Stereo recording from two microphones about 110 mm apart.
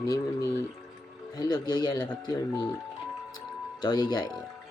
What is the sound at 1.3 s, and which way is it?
Speech, 40° left (ahead or behind).